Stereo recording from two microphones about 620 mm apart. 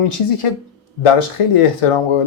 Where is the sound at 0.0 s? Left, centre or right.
Left.